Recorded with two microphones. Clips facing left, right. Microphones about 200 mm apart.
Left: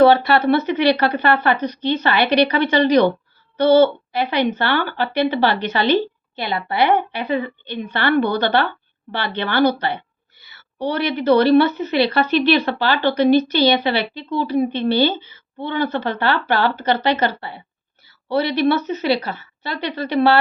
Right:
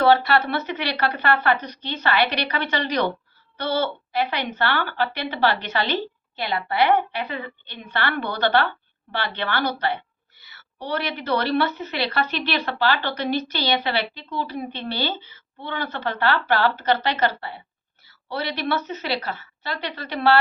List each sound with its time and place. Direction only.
0.0 s a woman's voice: 20° left (ahead or behind)